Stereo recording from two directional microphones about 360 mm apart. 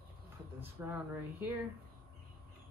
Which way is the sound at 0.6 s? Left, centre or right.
Centre.